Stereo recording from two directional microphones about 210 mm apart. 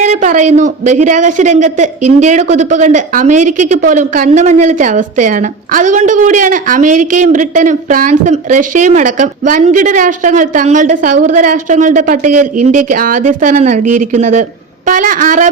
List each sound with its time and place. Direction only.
0.0 s a woman's voice: 35° right (ahead or behind)